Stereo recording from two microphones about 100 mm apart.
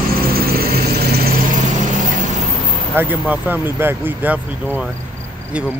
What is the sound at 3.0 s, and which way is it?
Speech, 20° right (ahead or behind).